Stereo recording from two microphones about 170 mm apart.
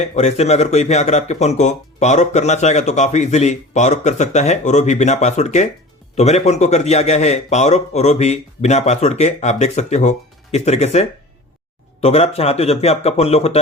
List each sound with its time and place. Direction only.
0.2 s a man's voice: 40° left (ahead or behind)